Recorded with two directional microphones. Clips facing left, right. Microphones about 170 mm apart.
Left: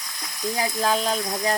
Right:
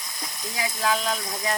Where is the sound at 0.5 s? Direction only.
35° left (ahead or behind).